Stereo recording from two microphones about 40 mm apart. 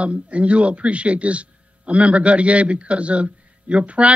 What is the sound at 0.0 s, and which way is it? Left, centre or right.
Speech, right.